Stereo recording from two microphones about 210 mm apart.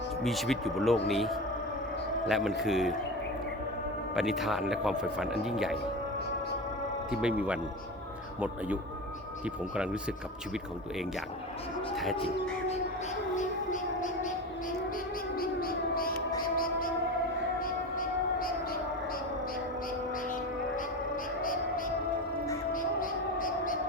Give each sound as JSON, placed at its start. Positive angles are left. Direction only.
{"t": 0.2, "sound": "speech", "side_deg": 0}
{"t": 4.1, "sound": "speech", "side_deg": 0}
{"t": 7.1, "sound": "speech", "side_deg": -5}
{"t": 9.7, "sound": "speech", "side_deg": -5}
{"t": 13.3, "sound": "music", "side_deg": 35}
{"t": 15.4, "sound": "civil defense siren", "side_deg": 45}
{"t": 17.6, "sound": "civil defense siren", "side_deg": 40}
{"t": 22.7, "sound": "music", "side_deg": 40}